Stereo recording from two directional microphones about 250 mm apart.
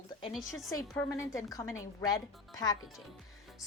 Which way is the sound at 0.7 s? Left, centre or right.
Centre.